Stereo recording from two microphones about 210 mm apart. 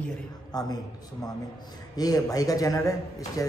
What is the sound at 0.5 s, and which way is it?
Speech, 20° left (ahead or behind).